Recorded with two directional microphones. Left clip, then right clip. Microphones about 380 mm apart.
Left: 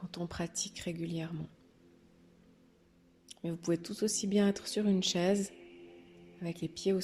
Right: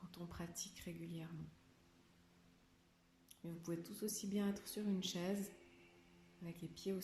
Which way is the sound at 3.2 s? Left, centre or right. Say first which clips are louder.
Left 14 dB; left.